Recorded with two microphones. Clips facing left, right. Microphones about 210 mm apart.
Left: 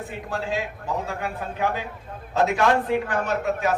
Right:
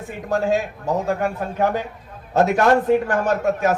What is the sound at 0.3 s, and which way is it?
A man's voice, 45° right (ahead or behind).